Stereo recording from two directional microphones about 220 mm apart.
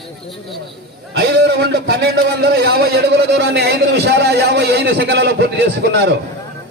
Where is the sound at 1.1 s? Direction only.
50° right (ahead or behind).